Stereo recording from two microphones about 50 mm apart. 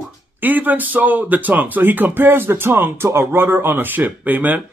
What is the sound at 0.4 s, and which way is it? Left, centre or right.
Speech, right.